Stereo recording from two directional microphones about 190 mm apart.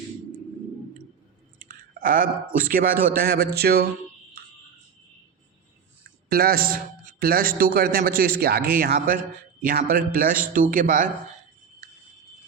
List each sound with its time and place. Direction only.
1.5 s a sound: 45° right (ahead or behind)
2.6 s speech: 50° right (ahead or behind)
6.3 s speech: 55° right (ahead or behind)